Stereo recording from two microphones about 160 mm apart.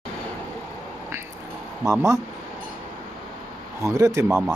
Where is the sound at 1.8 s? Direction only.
20° right (ahead or behind).